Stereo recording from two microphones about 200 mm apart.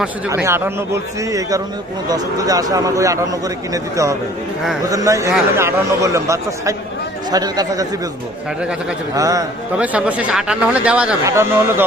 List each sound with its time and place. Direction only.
0.4 s speech: 10° right (ahead or behind)
9.1 s speech: 15° right (ahead or behind)
9.7 s speech: 5° right (ahead or behind)